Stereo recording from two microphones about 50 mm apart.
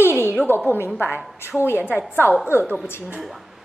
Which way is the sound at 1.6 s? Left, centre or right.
Left.